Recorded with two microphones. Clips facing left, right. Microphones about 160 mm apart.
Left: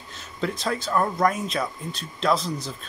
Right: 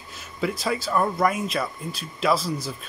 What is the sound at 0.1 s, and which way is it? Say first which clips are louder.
Speech: right 1 dB; 5° right (ahead or behind).